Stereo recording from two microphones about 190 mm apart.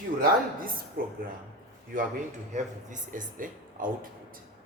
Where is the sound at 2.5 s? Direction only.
40° right (ahead or behind).